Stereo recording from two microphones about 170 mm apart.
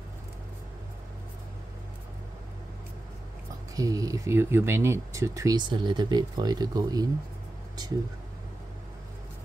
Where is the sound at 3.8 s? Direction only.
20° right (ahead or behind).